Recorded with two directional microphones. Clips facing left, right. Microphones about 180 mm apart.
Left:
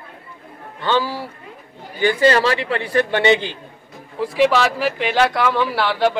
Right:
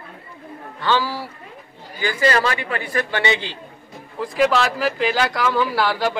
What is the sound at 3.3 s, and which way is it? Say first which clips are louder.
Speech: left 6 dB; 50° left (ahead or behind).